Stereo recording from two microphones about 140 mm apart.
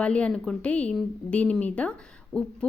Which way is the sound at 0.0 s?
10° left (ahead or behind).